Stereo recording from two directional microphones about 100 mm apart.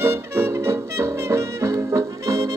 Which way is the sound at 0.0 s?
25° right (ahead or behind).